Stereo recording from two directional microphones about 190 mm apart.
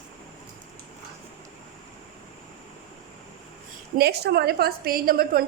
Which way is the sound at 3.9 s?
60° right (ahead or behind).